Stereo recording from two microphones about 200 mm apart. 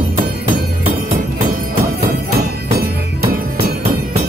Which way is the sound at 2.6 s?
50° right (ahead or behind).